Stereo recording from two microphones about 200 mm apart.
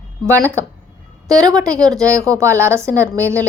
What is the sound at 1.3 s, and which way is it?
A woman's voice, 15° right (ahead or behind).